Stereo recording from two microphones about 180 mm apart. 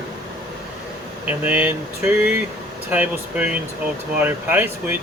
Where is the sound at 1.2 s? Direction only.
10° right (ahead or behind).